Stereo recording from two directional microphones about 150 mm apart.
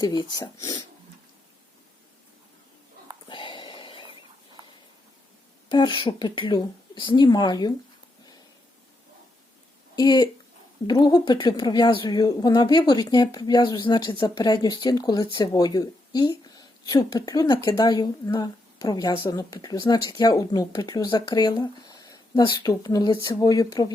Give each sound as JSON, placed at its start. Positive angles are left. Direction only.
{"t": 0.0, "sound": "a woman's voice", "side_deg": 25}
{"t": 3.2, "sound": "a sound", "side_deg": 35}
{"t": 5.7, "sound": "speech", "side_deg": 30}
{"t": 9.9, "sound": "a woman's voice", "side_deg": 25}